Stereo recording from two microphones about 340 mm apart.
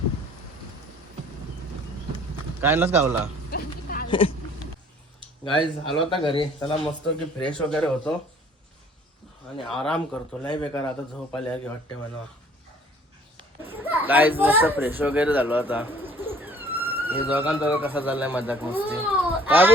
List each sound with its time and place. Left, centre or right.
2.6 s speech: centre
3.5 s a sound: left
4.1 s speech: centre
5.5 s speech: centre
7.4 s speech: centre
9.6 s speech: centre
10.5 s speech: centre
11.3 s speech: centre
13.7 s speech: centre